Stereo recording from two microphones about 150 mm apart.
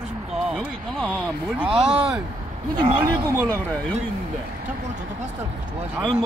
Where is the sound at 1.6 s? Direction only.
40° right (ahead or behind).